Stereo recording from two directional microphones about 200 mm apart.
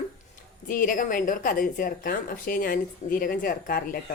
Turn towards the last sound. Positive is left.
turn(degrees=45)  # may be behind; listen again after turning